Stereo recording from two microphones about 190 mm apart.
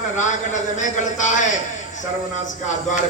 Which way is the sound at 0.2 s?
40° left (ahead or behind).